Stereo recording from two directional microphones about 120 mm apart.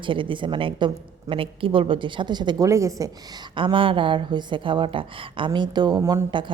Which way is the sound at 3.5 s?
45° right (ahead or behind).